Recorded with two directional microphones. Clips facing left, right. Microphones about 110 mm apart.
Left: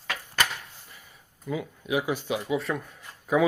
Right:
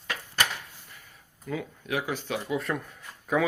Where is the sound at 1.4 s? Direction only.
10° left (ahead or behind).